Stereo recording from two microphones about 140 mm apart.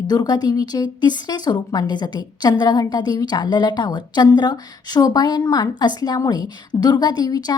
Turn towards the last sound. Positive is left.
turn(degrees=30)  # may be behind; listen again after turning